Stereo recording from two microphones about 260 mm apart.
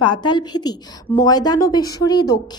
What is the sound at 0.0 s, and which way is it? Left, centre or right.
A woman's voice, centre.